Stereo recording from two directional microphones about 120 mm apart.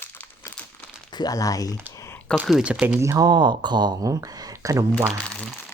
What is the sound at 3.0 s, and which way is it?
Speech, 30° right (ahead or behind).